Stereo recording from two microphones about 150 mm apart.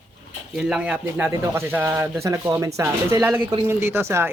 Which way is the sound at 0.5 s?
5° right (ahead or behind).